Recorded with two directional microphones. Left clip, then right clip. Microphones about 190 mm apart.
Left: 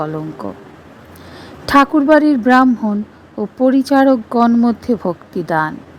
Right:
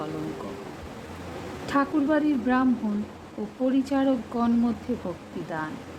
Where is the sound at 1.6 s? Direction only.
50° left (ahead or behind).